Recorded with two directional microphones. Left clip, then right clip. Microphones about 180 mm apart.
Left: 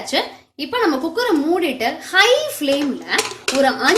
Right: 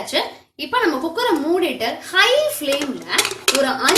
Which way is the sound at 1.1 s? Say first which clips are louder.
Left 1 dB; 55° left (ahead or behind).